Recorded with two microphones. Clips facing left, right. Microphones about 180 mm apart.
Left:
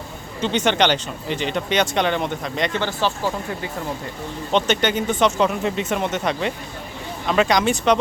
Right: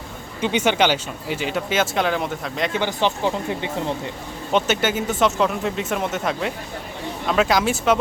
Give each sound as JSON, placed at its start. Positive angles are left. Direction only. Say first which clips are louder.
{"t": 0.4, "sound": "speech", "louder": "even", "side_deg": -10}
{"t": 2.8, "sound": "speech", "louder": "right 1 dB", "side_deg": -20}
{"t": 4.5, "sound": "speech", "louder": "left 1 dB", "side_deg": -5}